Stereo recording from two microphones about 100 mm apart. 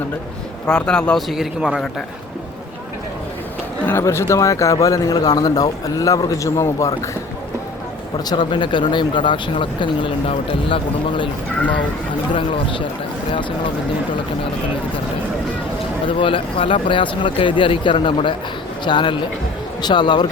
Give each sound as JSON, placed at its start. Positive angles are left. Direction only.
{"t": 0.7, "sound": "speech", "side_deg": 10}
{"t": 1.3, "sound": "a man's voice", "side_deg": -5}
{"t": 3.8, "sound": "speech", "side_deg": 25}
{"t": 8.2, "sound": "speech", "side_deg": 45}
{"t": 12.3, "sound": "speech", "side_deg": 60}
{"t": 16.0, "sound": "speech", "side_deg": 60}